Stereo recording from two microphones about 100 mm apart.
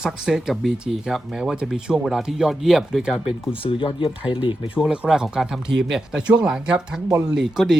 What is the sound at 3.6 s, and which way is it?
Speech, 60° left (ahead or behind).